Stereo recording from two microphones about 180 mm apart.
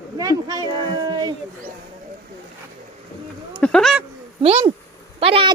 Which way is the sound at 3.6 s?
5° left (ahead or behind).